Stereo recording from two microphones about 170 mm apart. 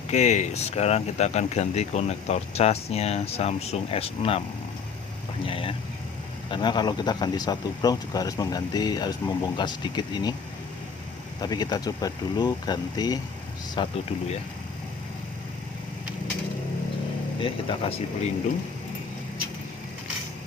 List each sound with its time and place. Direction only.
0.1 s speech: 40° left (ahead or behind)
5.5 s speech: 30° left (ahead or behind)
11.3 s speech: 25° left (ahead or behind)
17.4 s speech: 35° left (ahead or behind)